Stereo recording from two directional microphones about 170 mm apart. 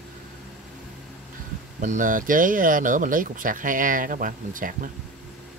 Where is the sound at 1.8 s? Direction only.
50° right (ahead or behind).